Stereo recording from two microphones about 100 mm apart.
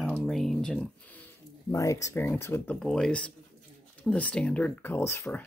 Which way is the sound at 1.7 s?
30° left (ahead or behind).